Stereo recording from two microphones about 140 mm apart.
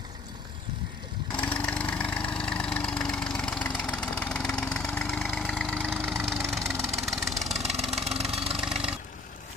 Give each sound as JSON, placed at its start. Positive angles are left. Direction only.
{"t": 1.3, "sound": "lawn mower", "side_deg": 10}
{"t": 5.5, "sound": "engine", "side_deg": 5}
{"t": 7.5, "sound": "vehicle", "side_deg": -50}
{"t": 7.9, "sound": "engine", "side_deg": -45}
{"t": 8.5, "sound": "vehicle", "side_deg": -5}